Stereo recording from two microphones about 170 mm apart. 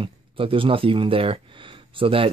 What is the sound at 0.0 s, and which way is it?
Speech, 30° right (ahead or behind).